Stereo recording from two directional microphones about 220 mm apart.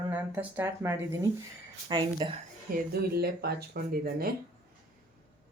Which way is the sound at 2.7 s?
45° right (ahead or behind).